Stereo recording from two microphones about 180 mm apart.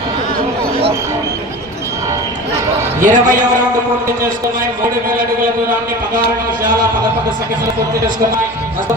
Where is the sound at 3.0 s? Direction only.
45° right (ahead or behind).